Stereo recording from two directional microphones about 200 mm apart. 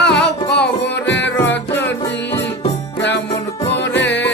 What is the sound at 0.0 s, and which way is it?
Music, 60° left (ahead or behind).